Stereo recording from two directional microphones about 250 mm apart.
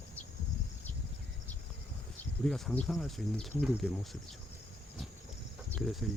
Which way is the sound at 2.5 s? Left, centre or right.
Centre.